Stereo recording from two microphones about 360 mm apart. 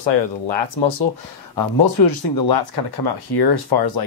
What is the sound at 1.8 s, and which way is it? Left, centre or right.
Speech, left.